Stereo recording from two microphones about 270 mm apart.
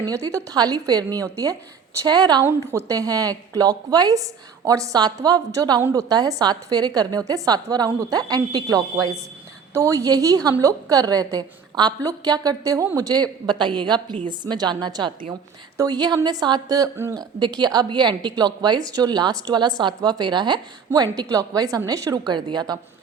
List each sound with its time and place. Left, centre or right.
0.0 s a woman's voice: centre